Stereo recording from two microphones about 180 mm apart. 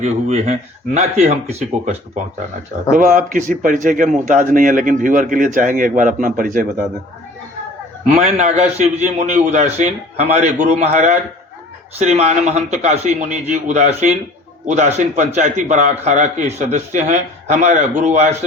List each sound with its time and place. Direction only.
0.0 s a man's voice: 40° right (ahead or behind)
8.0 s a man's voice: 40° right (ahead or behind)